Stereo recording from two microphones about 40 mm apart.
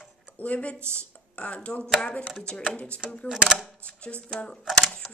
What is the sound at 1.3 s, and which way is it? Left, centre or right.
Speech, left.